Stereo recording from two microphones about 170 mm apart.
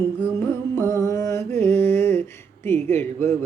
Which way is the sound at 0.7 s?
15° left (ahead or behind).